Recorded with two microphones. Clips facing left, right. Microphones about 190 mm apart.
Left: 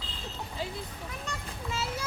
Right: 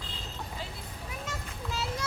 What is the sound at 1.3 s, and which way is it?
Vehicle, centre (ahead or behind).